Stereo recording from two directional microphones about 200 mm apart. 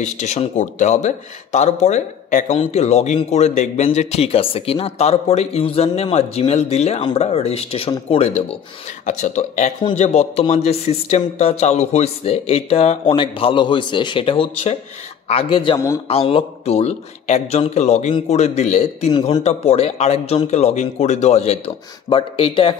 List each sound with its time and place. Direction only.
0.0 s speech: 35° left (ahead or behind)